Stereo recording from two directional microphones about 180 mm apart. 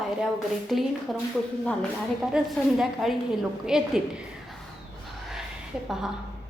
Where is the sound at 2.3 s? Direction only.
5° right (ahead or behind).